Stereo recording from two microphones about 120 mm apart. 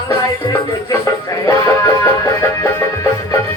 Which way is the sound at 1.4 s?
25° left (ahead or behind).